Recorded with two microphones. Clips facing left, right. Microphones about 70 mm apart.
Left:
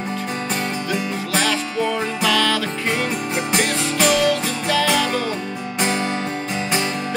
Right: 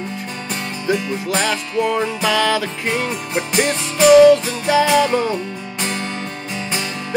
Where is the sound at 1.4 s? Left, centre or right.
Centre.